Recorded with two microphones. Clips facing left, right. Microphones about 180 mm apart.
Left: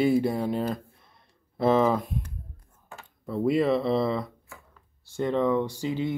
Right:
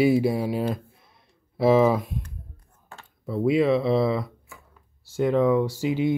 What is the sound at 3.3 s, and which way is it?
Speech, centre (ahead or behind).